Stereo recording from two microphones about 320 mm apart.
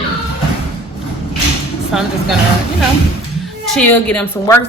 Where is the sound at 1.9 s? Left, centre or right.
Centre.